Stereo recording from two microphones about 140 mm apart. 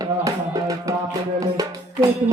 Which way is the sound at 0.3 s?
25° right (ahead or behind).